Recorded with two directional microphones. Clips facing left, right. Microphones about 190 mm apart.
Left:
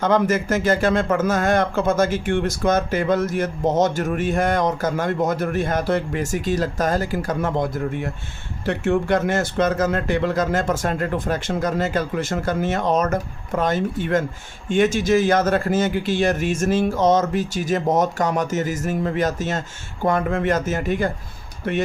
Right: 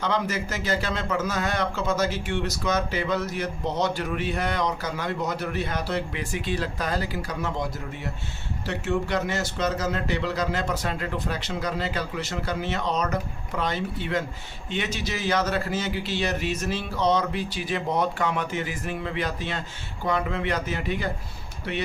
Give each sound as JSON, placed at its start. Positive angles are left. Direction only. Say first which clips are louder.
{"t": 0.0, "sound": "a man's voice", "louder": "left 8 dB", "side_deg": 50}